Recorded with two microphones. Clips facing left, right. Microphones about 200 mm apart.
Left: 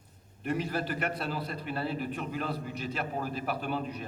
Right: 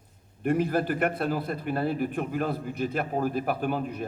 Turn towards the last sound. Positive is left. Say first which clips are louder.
# right 5 dB
turn(degrees=-50)  # may be behind; listen again after turning